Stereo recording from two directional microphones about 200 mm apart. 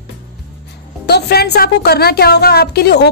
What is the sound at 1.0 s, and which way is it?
A woman's voice, 55° left (ahead or behind).